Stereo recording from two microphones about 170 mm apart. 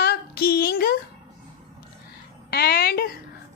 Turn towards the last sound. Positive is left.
turn(degrees=65)  # may be behind; listen again after turning